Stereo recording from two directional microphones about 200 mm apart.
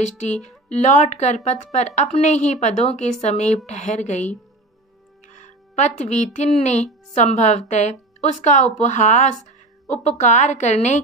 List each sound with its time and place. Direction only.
0.0 s a woman's voice: 35° left (ahead or behind)